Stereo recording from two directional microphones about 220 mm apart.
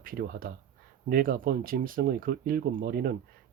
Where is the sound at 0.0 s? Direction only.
40° right (ahead or behind).